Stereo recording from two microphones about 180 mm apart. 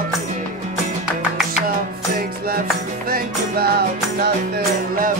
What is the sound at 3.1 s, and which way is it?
Music, 55° right (ahead or behind).